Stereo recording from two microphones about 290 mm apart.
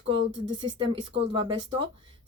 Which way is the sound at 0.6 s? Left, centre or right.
Centre.